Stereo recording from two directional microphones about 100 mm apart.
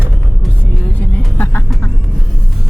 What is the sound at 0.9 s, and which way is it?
Vehicle, 15° left (ahead or behind).